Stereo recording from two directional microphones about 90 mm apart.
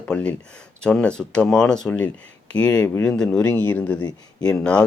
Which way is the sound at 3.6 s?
20° left (ahead or behind).